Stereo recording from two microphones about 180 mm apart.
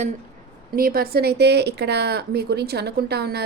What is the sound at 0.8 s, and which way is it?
Speech, 55° right (ahead or behind).